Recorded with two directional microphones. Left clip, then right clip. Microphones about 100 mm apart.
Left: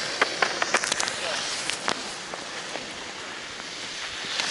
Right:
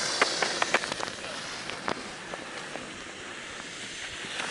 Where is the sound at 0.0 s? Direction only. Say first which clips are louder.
Left 2 dB; 10° right (ahead or behind).